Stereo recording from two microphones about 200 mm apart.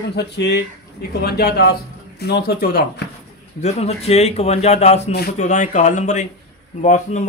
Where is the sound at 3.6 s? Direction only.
30° left (ahead or behind).